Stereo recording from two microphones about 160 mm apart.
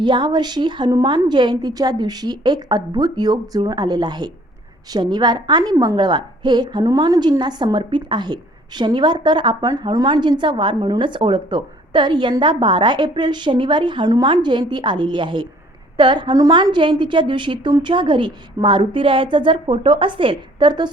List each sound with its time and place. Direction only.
0.0 s a woman's voice: 30° right (ahead or behind)